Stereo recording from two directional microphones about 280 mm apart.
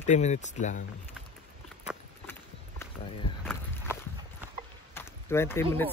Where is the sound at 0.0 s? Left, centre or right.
Left.